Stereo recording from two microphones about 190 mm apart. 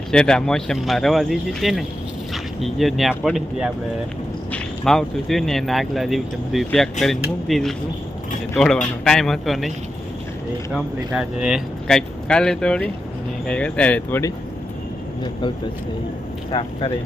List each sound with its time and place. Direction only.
0.1 s speech: 5° left (ahead or behind)
15.2 s speech: 25° left (ahead or behind)